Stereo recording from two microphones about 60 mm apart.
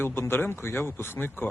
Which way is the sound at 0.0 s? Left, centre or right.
Left.